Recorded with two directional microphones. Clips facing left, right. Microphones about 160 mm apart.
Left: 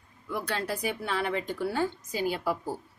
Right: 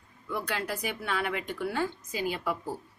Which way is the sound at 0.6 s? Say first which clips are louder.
Left 2 dB; 30° left (ahead or behind).